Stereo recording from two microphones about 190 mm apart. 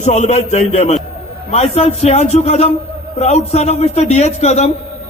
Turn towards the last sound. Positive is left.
turn(degrees=35)  # may be behind; listen again after turning